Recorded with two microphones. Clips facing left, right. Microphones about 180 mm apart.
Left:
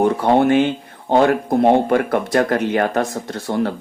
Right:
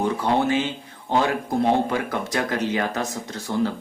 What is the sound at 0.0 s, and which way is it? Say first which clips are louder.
Speech: left 7 dB; 55° left (ahead or behind).